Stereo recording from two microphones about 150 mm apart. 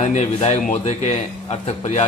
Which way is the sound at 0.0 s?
50° left (ahead or behind).